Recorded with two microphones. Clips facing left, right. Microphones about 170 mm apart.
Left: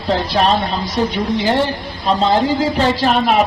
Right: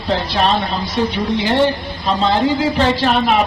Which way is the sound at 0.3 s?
40° left (ahead or behind).